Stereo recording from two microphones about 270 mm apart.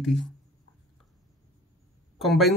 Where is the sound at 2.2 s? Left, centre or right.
Centre.